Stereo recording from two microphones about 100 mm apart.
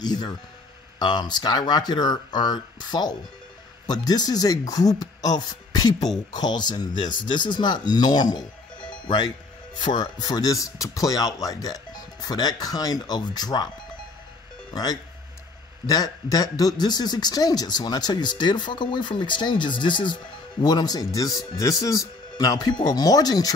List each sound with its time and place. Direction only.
0.0 s speech: 45° left (ahead or behind)
14.7 s speech: 40° left (ahead or behind)
20.6 s speech: 40° left (ahead or behind)